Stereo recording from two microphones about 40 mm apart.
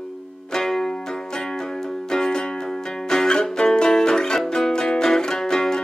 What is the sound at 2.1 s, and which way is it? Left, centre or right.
Music, centre.